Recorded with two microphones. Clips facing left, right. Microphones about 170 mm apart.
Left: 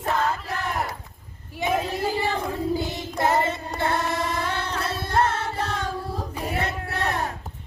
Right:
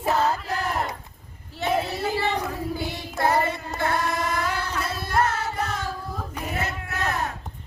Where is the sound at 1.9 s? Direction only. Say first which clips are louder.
Left 1 dB; 15° left (ahead or behind).